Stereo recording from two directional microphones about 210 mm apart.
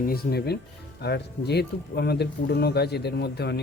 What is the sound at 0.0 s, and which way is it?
Speech, 45° left (ahead or behind).